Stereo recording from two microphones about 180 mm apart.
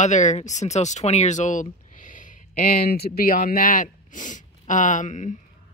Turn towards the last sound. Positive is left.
turn(degrees=45)  # may be behind; listen again after turning